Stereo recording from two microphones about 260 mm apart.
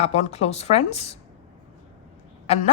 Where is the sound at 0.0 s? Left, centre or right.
Left.